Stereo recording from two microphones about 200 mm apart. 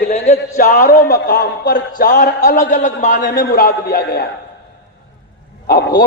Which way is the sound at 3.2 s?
50° left (ahead or behind).